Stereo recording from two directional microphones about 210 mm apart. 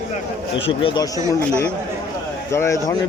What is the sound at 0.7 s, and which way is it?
Speech, 25° left (ahead or behind).